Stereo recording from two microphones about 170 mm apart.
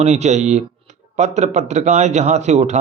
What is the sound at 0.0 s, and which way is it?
A man's voice, 40° right (ahead or behind).